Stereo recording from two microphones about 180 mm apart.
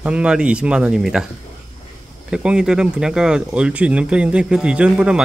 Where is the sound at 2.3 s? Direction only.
5° right (ahead or behind).